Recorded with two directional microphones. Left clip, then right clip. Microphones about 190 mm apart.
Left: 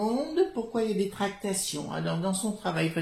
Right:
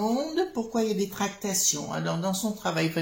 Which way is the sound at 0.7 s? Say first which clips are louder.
Right 1 dB; 35° right (ahead or behind).